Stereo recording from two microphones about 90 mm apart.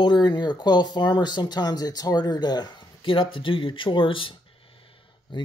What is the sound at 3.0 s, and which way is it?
Speech, 70° left (ahead or behind).